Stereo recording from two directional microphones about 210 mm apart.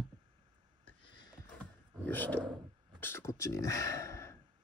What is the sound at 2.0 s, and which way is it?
Speech, 10° left (ahead or behind).